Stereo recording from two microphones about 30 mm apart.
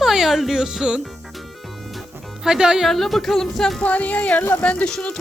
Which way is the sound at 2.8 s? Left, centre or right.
Centre.